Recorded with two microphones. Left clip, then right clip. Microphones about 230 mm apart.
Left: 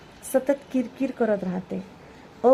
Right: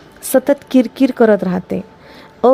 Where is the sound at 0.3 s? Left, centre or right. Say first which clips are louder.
Right 11 dB; right.